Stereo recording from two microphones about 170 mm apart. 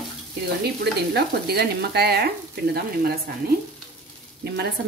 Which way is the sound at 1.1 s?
70° right (ahead or behind).